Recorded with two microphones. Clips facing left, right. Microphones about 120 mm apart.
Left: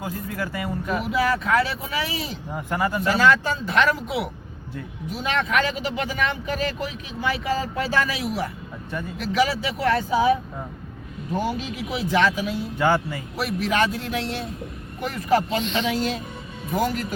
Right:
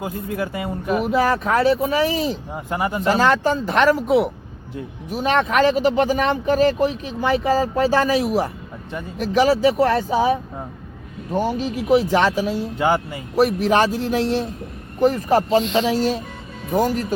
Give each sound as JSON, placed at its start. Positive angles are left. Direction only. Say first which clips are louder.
{"t": 0.0, "sound": "speech", "louder": "right 4 dB", "side_deg": -20}
{"t": 1.0, "sound": "speech", "louder": "right 4 dB", "side_deg": -45}
{"t": 2.5, "sound": "speech", "louder": "right 1 dB", "side_deg": -20}
{"t": 12.8, "sound": "speech", "louder": "right 1 dB", "side_deg": -20}
{"t": 13.3, "sound": "speech", "louder": "right 8 dB", "side_deg": -40}